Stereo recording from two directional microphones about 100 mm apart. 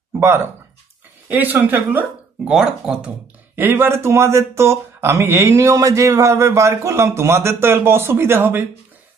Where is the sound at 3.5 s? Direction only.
20° right (ahead or behind).